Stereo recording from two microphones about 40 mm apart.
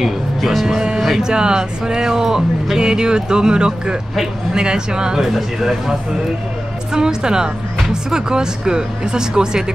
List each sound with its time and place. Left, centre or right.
0.0 s speech: centre
1.2 s speech: centre